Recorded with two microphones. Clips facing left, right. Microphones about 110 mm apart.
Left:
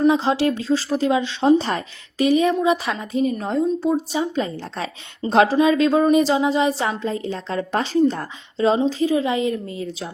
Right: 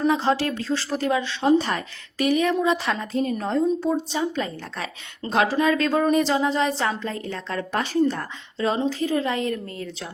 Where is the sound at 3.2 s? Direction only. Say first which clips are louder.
Left 3 dB; 5° left (ahead or behind).